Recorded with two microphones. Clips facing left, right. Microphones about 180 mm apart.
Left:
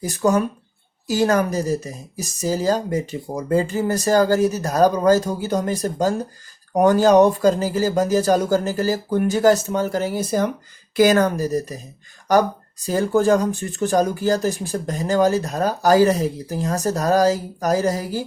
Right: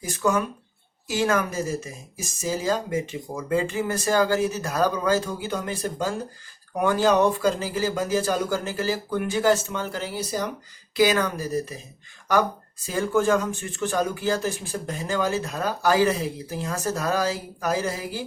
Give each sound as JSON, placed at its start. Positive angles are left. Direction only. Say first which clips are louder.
{"t": 0.0, "sound": "speech", "louder": "left 5 dB", "side_deg": 40}